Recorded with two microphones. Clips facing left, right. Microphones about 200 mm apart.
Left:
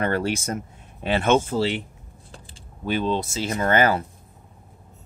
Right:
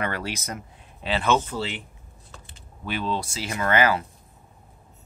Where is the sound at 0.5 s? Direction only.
50° left (ahead or behind).